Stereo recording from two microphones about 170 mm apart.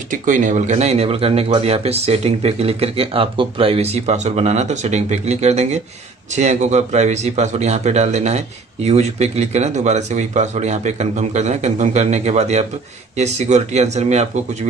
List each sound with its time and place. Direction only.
0.1 s speech: 50° right (ahead or behind)